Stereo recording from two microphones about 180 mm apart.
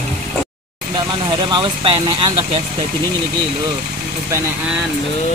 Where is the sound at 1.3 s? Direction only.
25° right (ahead or behind).